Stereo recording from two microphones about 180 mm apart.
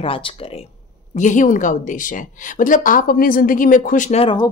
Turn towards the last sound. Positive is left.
turn(degrees=30)  # may be behind; listen again after turning